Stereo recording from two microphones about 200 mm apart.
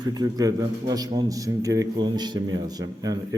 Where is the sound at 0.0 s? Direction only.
20° right (ahead or behind).